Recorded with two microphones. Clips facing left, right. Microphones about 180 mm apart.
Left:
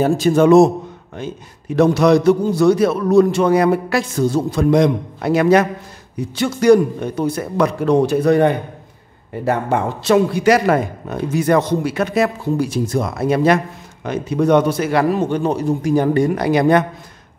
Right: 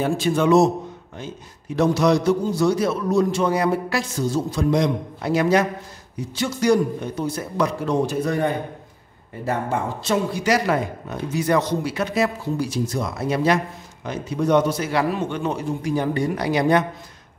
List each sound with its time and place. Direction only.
0.0 s a man's voice: 45° left (ahead or behind)
1.8 s a man's voice: 60° left (ahead or behind)